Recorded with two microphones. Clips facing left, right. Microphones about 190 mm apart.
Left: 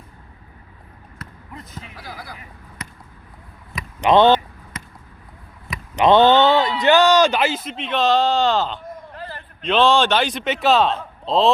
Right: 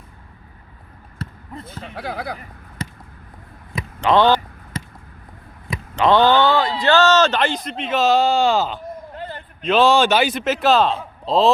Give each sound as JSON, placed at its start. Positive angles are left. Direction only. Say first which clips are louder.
{"t": 1.2, "sound": "basketball bounce", "louder": "right 6 dB", "side_deg": -30}
{"t": 2.0, "sound": "speech", "louder": "right 11 dB", "side_deg": -60}
{"t": 2.8, "sound": "basketball bounce", "louder": "right 7 dB", "side_deg": -30}
{"t": 4.0, "sound": "speech", "louder": "left 2 dB", "side_deg": 20}
{"t": 4.7, "sound": "basketball bounce", "louder": "right 7 dB", "side_deg": -30}
{"t": 6.0, "sound": "a man's voice", "louder": "left 2 dB", "side_deg": 20}
{"t": 9.1, "sound": "a sound", "louder": "right 3 dB", "side_deg": -20}
{"t": 9.6, "sound": "a man's voice", "louder": "right 1 dB", "side_deg": -5}